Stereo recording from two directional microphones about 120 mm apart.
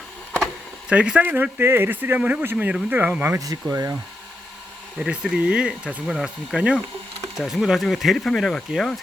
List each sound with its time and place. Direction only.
0.9 s speech: 10° right (ahead or behind)
3.3 s speech: 30° right (ahead or behind)
4.9 s speech: 10° right (ahead or behind)